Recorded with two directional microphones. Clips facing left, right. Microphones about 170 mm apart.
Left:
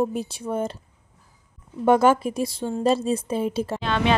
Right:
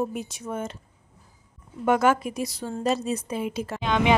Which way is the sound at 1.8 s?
30° left (ahead or behind).